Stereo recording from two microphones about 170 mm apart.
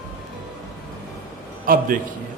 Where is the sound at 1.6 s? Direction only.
55° right (ahead or behind).